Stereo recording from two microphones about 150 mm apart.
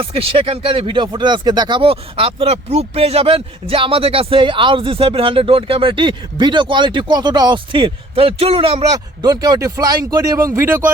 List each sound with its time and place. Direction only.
0.0 s speech: 40° right (ahead or behind)
9.2 s speech: 25° right (ahead or behind)